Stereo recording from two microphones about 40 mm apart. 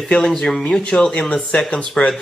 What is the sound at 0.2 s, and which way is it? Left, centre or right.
Speech, centre.